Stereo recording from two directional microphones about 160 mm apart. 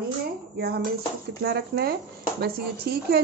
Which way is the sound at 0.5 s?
90° right.